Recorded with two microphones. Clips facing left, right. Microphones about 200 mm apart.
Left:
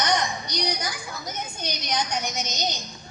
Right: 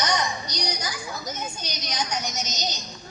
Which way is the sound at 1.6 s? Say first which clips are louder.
Left 3 dB; 55° left (ahead or behind).